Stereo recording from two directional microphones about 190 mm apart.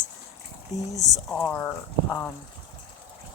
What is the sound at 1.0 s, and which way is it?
Speech, 5° left (ahead or behind).